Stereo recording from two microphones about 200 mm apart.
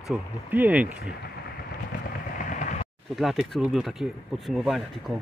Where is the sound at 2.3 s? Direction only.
40° left (ahead or behind).